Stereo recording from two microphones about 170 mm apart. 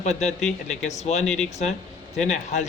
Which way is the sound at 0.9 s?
45° left (ahead or behind).